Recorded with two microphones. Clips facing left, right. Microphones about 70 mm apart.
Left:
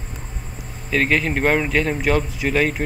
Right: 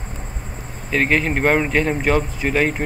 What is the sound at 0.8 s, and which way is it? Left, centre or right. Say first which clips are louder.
Speech: right 1 dB; centre.